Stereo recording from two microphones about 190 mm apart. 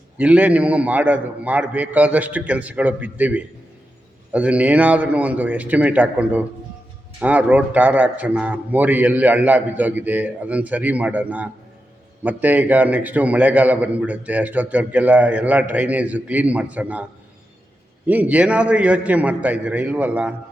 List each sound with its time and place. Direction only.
0.2 s a man's voice: 5° right (ahead or behind)